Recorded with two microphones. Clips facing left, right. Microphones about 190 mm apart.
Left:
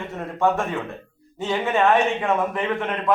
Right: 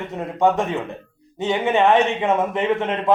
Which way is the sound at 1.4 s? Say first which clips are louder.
Right 2 dB; 20° right (ahead or behind).